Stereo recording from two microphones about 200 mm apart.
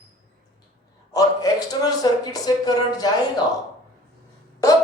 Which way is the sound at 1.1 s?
20° left (ahead or behind).